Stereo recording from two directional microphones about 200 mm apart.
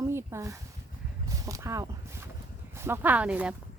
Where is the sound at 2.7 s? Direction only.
10° right (ahead or behind).